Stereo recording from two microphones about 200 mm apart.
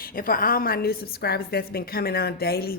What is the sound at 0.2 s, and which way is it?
A woman's voice, 45° left (ahead or behind).